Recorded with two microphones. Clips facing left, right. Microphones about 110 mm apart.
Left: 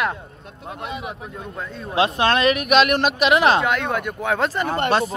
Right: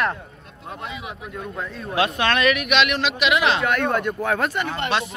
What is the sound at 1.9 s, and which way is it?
Speech, 30° left (ahead or behind).